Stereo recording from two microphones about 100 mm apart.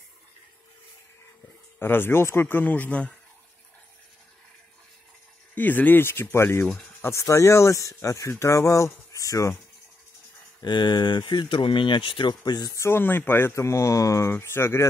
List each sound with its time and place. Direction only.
1.8 s speech: 20° left (ahead or behind)
5.5 s speech: 20° left (ahead or behind); by 9.6 s 35° left (ahead or behind)
10.6 s speech: 50° left (ahead or behind)
12.7 s speech: 25° left (ahead or behind)